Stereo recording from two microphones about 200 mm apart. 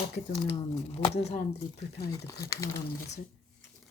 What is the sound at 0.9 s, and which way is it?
Speech, 30° left (ahead or behind).